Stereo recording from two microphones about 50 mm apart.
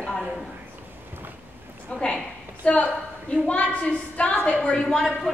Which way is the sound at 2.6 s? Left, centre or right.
Left.